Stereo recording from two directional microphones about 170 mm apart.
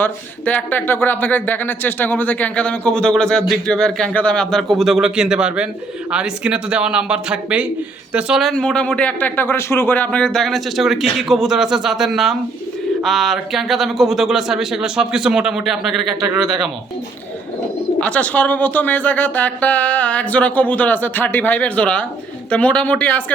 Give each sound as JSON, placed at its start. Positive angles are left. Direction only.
{"t": 0.0, "sound": "speech", "side_deg": 10}
{"t": 18.0, "sound": "speech", "side_deg": 5}